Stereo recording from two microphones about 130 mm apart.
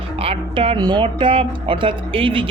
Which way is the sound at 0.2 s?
50° right (ahead or behind).